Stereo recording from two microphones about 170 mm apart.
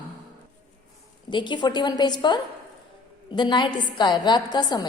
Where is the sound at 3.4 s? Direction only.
25° left (ahead or behind).